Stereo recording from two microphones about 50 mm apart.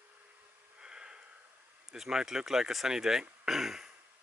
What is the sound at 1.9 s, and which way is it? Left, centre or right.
Speech, centre.